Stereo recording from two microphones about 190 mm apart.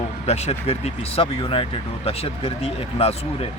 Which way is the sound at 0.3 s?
35° left (ahead or behind).